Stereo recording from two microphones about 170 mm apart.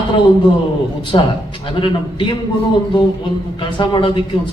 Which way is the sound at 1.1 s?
30° left (ahead or behind).